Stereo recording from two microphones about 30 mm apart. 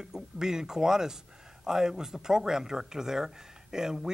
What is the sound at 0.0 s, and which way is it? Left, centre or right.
Speech, centre.